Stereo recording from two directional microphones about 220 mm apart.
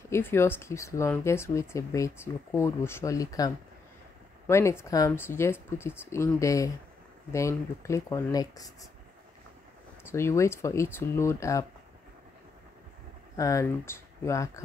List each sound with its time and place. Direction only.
0.1 s speech: 10° left (ahead or behind)
10.0 s speech: 10° left (ahead or behind)
13.4 s speech: 15° left (ahead or behind)